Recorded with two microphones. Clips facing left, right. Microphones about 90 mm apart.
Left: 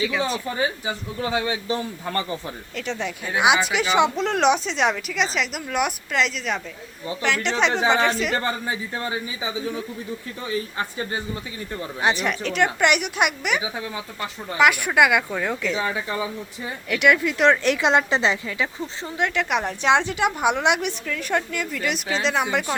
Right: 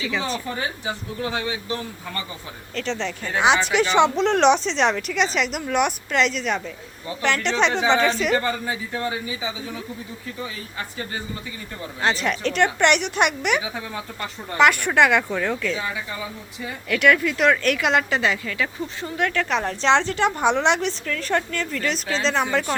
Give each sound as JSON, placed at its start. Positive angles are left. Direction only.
{"t": 0.0, "sound": "speech", "side_deg": 5}
{"t": 0.5, "sound": "speech", "side_deg": 15}
{"t": 2.7, "sound": "speech", "side_deg": 10}
{"t": 8.4, "sound": "speech", "side_deg": 25}
{"t": 12.0, "sound": "speech", "side_deg": 15}
{"t": 12.3, "sound": "speech", "side_deg": 5}
{"t": 15.8, "sound": "speech", "side_deg": 45}
{"t": 16.9, "sound": "speech", "side_deg": 15}